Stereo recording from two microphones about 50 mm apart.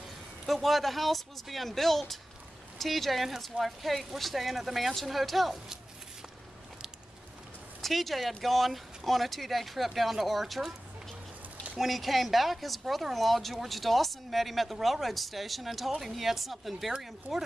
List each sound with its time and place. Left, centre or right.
0.5 s speech: centre
7.8 s speech: centre
11.7 s speech: centre